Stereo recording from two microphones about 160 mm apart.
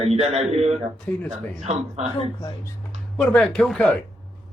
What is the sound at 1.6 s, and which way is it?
Speech, 45° right (ahead or behind).